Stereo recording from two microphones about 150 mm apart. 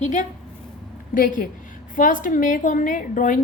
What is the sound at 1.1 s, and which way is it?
A woman's voice, 65° left (ahead or behind).